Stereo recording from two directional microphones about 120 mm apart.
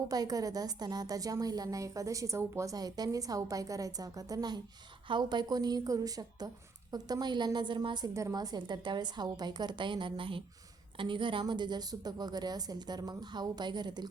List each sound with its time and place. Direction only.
0.1 s a woman's voice: 30° right (ahead or behind)